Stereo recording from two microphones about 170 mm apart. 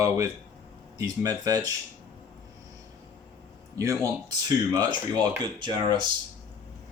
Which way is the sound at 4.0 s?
20° right (ahead or behind).